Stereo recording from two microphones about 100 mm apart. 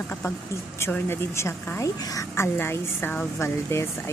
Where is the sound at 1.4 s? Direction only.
30° left (ahead or behind).